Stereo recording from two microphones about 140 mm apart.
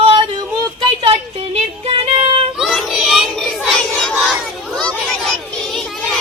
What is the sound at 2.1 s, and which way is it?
Children playing, 45° right (ahead or behind).